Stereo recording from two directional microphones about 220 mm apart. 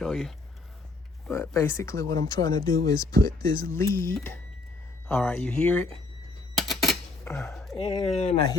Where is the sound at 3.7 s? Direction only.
15° left (ahead or behind).